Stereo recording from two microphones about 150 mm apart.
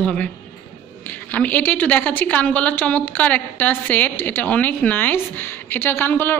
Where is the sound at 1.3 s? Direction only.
10° left (ahead or behind).